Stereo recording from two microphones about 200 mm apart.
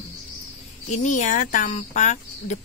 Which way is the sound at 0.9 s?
35° left (ahead or behind).